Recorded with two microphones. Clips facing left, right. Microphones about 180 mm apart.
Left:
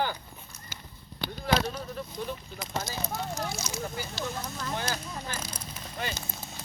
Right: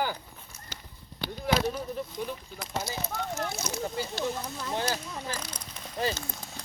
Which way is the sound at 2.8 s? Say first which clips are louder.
Even; 15° left (ahead or behind).